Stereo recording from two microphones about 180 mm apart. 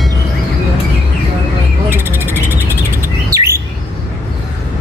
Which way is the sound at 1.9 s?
10° right (ahead or behind).